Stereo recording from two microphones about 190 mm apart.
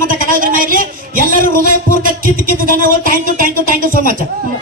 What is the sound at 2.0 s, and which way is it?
Speech, 45° right (ahead or behind).